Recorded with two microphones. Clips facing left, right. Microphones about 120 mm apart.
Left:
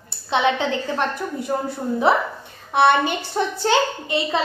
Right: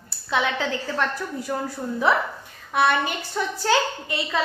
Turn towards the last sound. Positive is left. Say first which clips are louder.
# left 4 dB
turn(degrees=25)  # may be behind; listen again after turning